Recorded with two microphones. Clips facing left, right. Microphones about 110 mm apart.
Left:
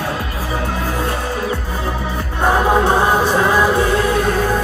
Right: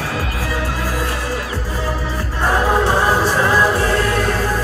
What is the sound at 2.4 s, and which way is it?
Music, 20° left (ahead or behind).